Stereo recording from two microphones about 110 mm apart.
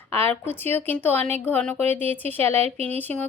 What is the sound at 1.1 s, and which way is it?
Speech, 70° right (ahead or behind).